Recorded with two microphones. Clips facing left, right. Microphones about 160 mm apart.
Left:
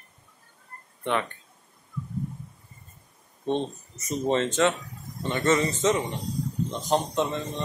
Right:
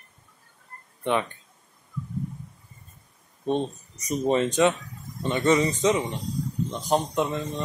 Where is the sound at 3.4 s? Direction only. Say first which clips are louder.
Right 1 dB; 15° right (ahead or behind).